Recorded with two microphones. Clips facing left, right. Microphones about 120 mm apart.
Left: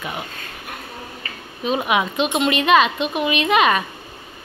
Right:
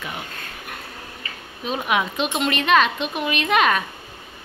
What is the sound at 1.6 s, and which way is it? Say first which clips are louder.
A woman's voice: left 3 dB; 5° left (ahead or behind).